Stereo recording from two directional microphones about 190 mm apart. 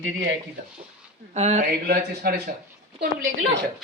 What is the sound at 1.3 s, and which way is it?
Speech, 40° right (ahead or behind).